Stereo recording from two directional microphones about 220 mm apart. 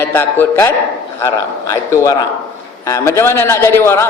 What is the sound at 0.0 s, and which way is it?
A man's voice, 10° left (ahead or behind).